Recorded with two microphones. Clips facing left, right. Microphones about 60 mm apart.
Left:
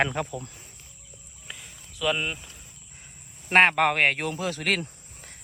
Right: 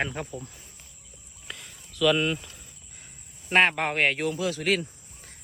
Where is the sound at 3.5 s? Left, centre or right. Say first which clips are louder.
Left 3 dB; left.